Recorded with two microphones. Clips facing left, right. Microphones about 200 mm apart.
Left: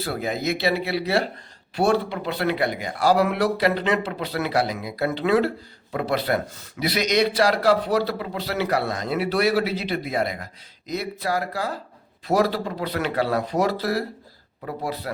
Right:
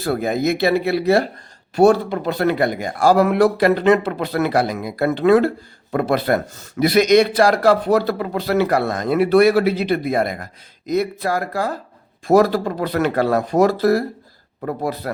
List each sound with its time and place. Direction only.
0.0 s a man's voice: 50° right (ahead or behind)